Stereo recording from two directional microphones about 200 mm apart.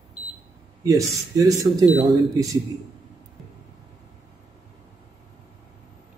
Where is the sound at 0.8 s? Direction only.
15° right (ahead or behind).